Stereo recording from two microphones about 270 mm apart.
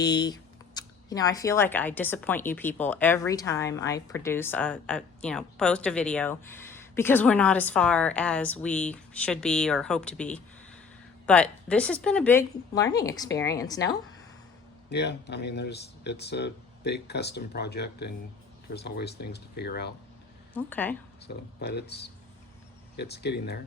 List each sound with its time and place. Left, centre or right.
0.0 s speech: centre
14.8 s speech: left
20.5 s speech: centre
21.2 s speech: left